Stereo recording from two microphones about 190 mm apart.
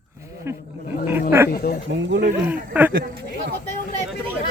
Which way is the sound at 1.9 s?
60° right (ahead or behind).